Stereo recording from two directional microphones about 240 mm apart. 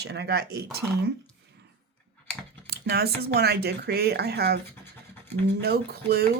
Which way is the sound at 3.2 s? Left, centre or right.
Right.